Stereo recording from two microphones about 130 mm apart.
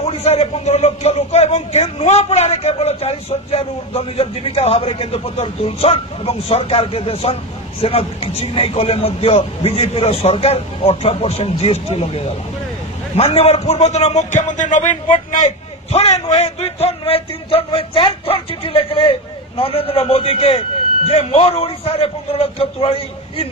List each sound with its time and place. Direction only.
0.0 s a man's voice: 55° left (ahead or behind)